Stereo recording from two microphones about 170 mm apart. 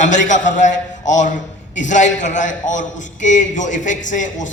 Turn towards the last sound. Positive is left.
turn(degrees=45)  # may be behind; listen again after turning